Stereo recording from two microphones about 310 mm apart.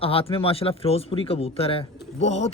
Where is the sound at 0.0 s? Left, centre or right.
Centre.